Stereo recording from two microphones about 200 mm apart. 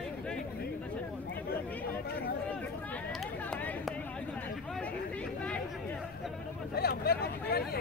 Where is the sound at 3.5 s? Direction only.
5° left (ahead or behind).